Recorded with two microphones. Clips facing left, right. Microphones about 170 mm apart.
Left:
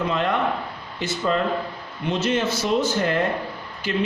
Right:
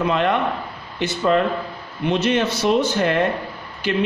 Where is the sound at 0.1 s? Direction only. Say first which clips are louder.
Right 3 dB; 65° right (ahead or behind).